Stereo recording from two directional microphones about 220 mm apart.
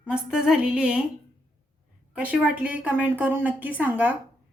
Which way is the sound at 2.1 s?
5° right (ahead or behind).